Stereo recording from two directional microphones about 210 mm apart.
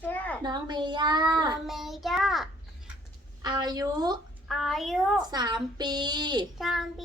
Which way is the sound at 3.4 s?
20° right (ahead or behind).